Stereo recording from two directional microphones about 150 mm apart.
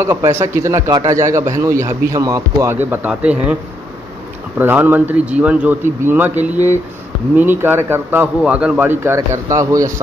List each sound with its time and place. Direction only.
0.0 s a man's voice: 15° right (ahead or behind)
4.6 s a man's voice: 10° right (ahead or behind)